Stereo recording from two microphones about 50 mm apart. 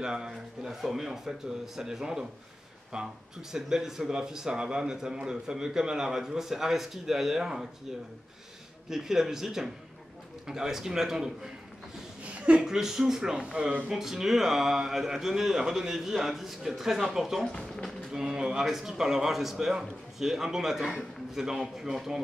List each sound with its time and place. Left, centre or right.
0.0 s speech: centre
8.9 s speech: centre
12.2 s a sound: right
12.6 s speech: centre
17.5 s speech: centre
18.2 s speech: centre